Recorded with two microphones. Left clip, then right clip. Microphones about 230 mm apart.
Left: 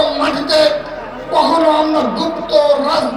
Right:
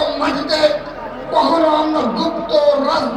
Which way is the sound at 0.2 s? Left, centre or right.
Left.